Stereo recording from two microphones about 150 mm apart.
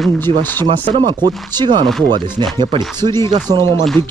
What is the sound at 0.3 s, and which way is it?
Speech, 40° right (ahead or behind).